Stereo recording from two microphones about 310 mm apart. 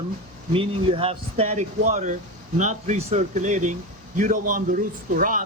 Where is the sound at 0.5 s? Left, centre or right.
Centre.